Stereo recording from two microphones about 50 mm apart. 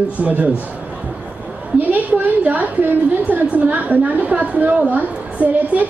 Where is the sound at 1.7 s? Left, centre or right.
Right.